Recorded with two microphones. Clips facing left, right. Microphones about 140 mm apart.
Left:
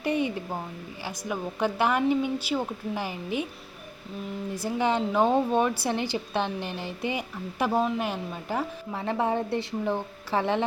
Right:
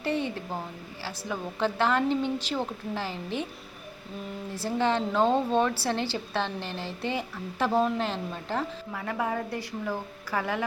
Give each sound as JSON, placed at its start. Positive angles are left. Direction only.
{"t": 0.0, "sound": "a sound", "side_deg": 15}
{"t": 1.0, "sound": "a woman's voice", "side_deg": 15}
{"t": 4.5, "sound": "a woman's voice", "side_deg": 15}
{"t": 8.9, "sound": "a woman's voice", "side_deg": 25}